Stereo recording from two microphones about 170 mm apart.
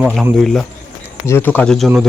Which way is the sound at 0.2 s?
Centre (ahead or behind).